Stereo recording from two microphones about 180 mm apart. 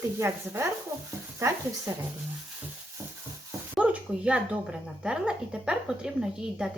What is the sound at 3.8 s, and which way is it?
Speech, 5° right (ahead or behind).